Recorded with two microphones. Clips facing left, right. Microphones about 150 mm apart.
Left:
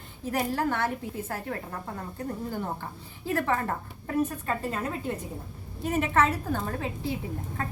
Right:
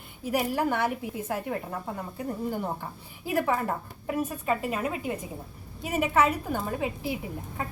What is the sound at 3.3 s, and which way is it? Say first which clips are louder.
A woman's voice: right 1 dB; 10° right (ahead or behind).